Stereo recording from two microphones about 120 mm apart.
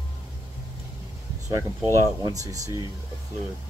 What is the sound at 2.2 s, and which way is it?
Speech, 30° right (ahead or behind).